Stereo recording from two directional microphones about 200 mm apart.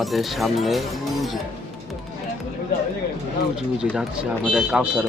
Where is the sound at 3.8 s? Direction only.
5° right (ahead or behind).